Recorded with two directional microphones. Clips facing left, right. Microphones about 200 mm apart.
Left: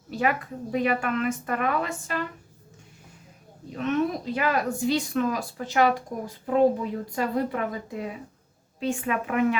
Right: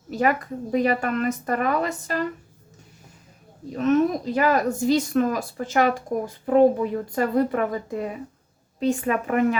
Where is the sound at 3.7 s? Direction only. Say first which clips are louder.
Right 6 dB; 40° right (ahead or behind).